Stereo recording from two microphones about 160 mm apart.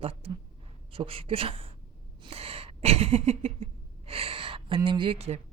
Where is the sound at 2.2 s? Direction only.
35° right (ahead or behind).